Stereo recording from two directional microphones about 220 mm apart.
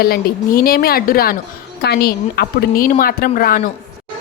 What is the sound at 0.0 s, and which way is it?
A woman's voice, 45° left (ahead or behind).